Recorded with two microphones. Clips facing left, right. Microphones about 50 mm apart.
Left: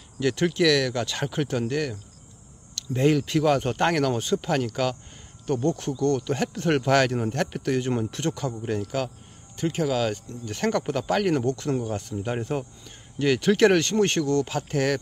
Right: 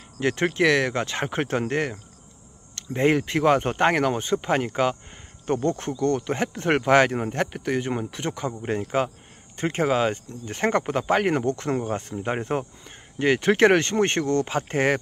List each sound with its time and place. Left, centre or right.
0.2 s speech: right